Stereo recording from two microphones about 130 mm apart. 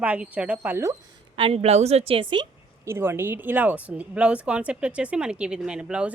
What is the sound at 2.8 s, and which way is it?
A woman's voice, 20° right (ahead or behind).